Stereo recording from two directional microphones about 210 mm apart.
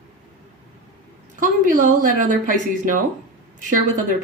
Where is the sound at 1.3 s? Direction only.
40° right (ahead or behind).